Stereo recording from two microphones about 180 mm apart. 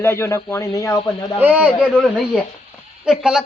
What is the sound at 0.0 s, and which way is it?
A man's voice, 15° left (ahead or behind).